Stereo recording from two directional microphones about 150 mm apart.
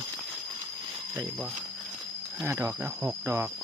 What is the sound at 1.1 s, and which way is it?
Speech, 10° right (ahead or behind).